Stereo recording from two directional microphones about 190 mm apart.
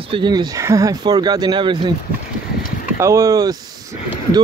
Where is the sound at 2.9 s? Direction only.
15° right (ahead or behind).